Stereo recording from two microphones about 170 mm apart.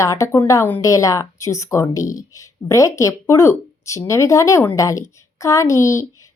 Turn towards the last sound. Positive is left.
turn(degrees=20)  # may be behind; listen again after turning